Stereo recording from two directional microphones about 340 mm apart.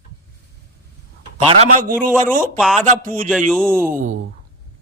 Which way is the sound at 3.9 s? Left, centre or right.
Right.